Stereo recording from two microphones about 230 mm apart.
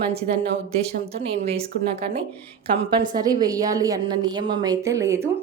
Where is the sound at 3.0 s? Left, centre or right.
Centre.